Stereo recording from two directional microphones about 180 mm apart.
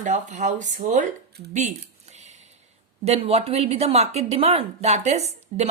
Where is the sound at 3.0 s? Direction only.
35° right (ahead or behind).